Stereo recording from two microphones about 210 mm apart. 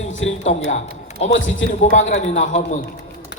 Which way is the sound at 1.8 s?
35° left (ahead or behind).